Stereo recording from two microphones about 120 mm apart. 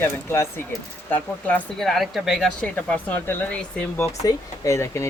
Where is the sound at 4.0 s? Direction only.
25° left (ahead or behind).